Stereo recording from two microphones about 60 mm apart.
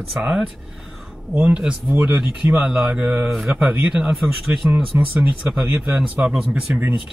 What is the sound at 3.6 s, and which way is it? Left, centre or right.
Speech, right.